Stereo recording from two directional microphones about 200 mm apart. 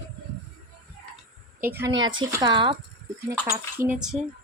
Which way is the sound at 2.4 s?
20° right (ahead or behind).